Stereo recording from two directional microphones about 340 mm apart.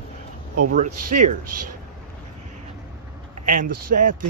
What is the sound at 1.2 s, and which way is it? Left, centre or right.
Speech, right.